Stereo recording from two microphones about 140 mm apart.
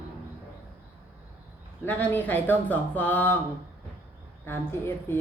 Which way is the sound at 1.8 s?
15° left (ahead or behind).